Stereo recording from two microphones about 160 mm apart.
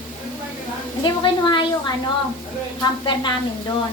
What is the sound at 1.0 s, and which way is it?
Speech, 30° left (ahead or behind).